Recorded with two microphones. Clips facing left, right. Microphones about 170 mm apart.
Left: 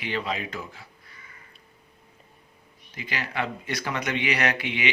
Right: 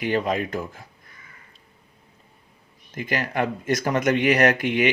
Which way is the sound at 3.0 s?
50° right (ahead or behind).